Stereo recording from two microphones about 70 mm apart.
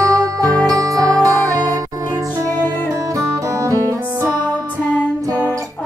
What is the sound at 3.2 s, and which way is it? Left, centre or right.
Music, right.